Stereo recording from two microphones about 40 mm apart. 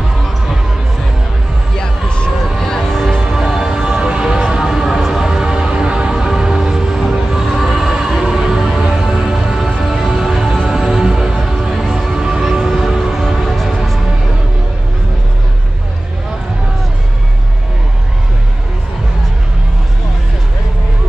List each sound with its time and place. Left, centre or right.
1.8 s a sound: left
2.6 s music: centre
3.3 s music: centre